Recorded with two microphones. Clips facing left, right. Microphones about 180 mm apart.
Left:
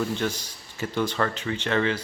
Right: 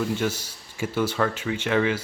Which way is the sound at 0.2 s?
10° right (ahead or behind).